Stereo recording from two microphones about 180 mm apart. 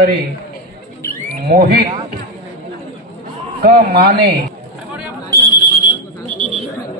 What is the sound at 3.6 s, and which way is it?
Speech, 60° right (ahead or behind).